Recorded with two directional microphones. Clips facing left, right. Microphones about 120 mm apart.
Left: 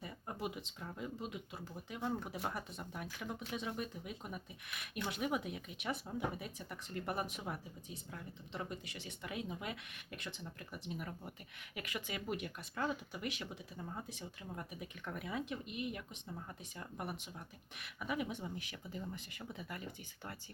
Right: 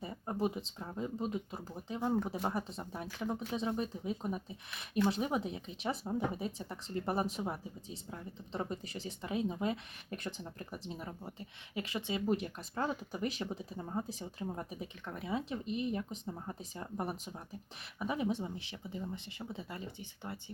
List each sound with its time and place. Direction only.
0.0 s speech: 35° right (ahead or behind)
10.2 s speech: 40° right (ahead or behind); by 20.4 s 25° right (ahead or behind)